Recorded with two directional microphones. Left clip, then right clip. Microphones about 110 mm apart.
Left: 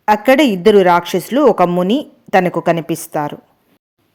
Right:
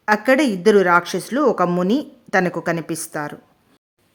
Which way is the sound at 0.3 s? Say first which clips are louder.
Left 5 dB; 30° left (ahead or behind).